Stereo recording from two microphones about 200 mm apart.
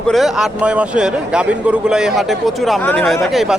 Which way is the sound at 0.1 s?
Centre (ahead or behind).